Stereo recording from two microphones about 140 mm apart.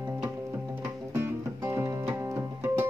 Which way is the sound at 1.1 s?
15° right (ahead or behind).